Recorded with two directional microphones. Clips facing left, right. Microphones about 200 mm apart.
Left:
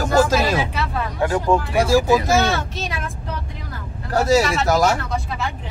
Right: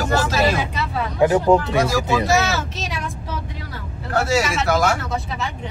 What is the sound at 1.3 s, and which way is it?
Speech, 20° right (ahead or behind).